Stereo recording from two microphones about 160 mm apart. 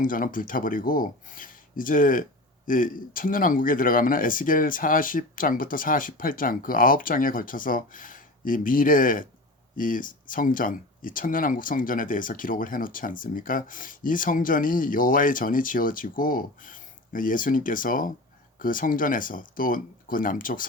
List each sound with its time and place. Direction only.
0.0 s speech: 60° left (ahead or behind)